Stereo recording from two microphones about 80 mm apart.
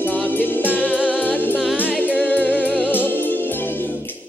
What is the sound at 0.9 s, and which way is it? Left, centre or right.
Music, centre.